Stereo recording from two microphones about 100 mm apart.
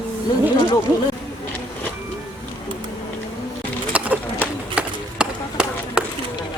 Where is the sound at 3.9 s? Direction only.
15° right (ahead or behind).